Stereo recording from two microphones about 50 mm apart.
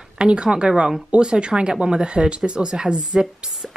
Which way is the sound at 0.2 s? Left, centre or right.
Centre.